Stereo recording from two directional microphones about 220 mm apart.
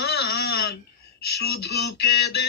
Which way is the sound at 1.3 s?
45° left (ahead or behind).